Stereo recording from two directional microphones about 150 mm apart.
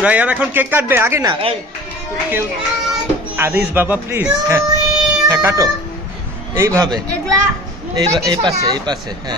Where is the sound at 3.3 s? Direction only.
15° right (ahead or behind).